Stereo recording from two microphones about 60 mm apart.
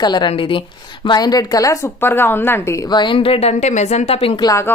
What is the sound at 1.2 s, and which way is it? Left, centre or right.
Speech, left.